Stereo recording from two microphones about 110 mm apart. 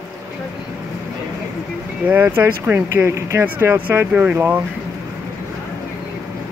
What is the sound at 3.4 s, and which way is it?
Speech, 15° right (ahead or behind).